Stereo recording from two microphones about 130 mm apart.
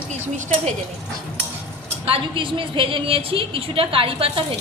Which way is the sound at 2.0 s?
45° right (ahead or behind).